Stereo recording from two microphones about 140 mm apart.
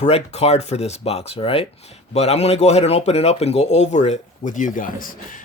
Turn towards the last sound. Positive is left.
turn(degrees=75)  # may be behind; listen again after turning